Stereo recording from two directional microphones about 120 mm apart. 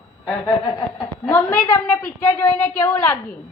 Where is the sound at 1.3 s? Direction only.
15° left (ahead or behind).